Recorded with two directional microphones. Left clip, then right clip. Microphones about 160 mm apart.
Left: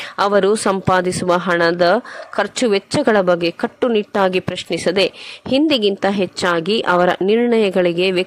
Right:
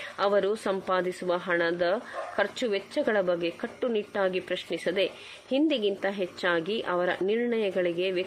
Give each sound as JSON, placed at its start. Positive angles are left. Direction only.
{"t": 0.2, "sound": "speech", "side_deg": 45}